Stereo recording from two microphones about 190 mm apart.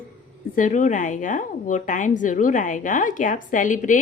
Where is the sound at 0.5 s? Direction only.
40° left (ahead or behind).